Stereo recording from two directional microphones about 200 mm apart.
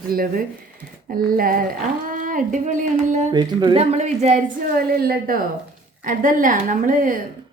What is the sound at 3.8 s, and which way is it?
A woman's voice, 35° right (ahead or behind).